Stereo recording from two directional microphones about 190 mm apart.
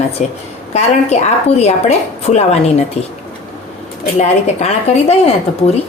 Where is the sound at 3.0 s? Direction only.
35° left (ahead or behind).